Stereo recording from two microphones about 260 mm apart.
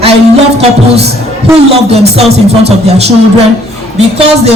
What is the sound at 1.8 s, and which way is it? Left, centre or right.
Speech, right.